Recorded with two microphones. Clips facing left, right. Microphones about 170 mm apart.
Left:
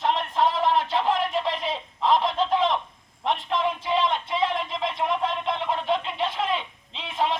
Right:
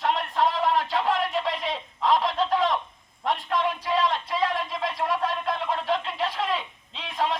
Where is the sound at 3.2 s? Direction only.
25° left (ahead or behind).